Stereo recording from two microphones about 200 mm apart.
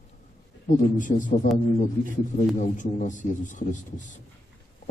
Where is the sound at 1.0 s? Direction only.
40° left (ahead or behind).